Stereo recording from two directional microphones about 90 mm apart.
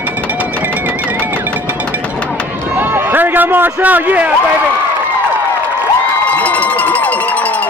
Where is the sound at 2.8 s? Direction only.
20° right (ahead or behind).